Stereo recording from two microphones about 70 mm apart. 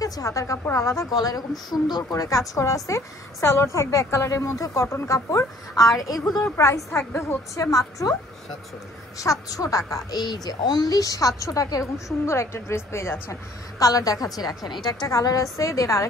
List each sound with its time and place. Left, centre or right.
0.0 s a woman's voice: left
1.7 s speech: left
2.2 s a woman's voice: left
5.8 s a woman's voice: left
6.5 s a woman's voice: left
9.2 s a woman's voice: left
10.1 s a woman's voice: left
13.3 s a woman's voice: left
15.0 s a woman's voice: left